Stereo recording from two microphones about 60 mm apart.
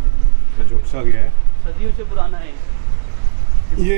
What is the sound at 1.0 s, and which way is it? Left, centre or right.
Speech, centre.